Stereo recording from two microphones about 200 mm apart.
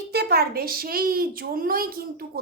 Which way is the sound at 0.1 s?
50° right (ahead or behind).